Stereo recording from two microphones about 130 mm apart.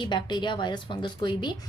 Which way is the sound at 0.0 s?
35° left (ahead or behind).